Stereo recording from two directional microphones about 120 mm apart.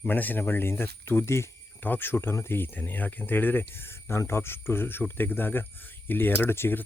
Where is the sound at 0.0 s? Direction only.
15° left (ahead or behind).